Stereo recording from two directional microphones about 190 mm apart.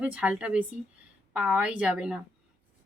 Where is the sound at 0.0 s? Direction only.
5° right (ahead or behind).